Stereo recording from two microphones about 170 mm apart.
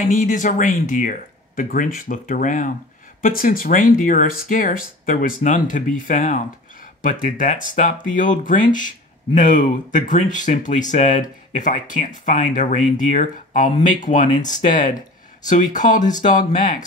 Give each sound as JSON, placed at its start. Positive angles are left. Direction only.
{"t": 0.1, "sound": "speech", "side_deg": 50}